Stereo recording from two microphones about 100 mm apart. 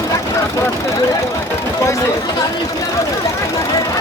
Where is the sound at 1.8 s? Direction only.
30° left (ahead or behind).